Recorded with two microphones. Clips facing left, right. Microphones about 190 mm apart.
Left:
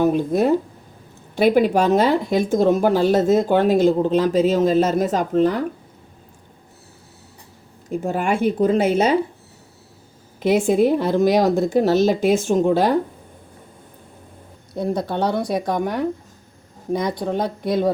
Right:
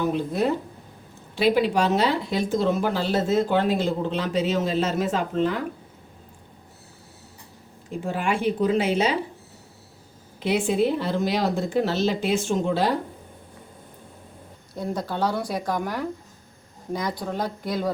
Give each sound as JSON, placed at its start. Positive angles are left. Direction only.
{"t": 0.0, "sound": "speech", "side_deg": 45}
{"t": 7.9, "sound": "speech", "side_deg": 45}
{"t": 10.4, "sound": "speech", "side_deg": 45}
{"t": 14.8, "sound": "speech", "side_deg": 25}